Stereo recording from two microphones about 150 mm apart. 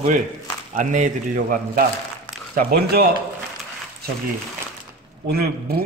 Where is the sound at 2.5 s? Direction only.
85° right.